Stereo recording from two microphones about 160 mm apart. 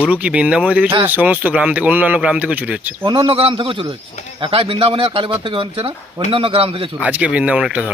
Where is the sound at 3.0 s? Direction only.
30° right (ahead or behind).